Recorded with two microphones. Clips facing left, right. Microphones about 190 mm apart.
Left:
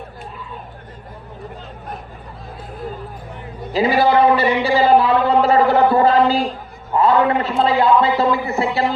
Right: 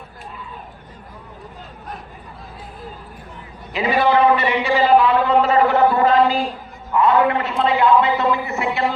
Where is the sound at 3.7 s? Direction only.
35° left (ahead or behind).